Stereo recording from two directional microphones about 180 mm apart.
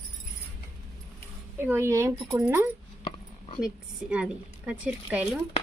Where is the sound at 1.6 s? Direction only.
15° right (ahead or behind).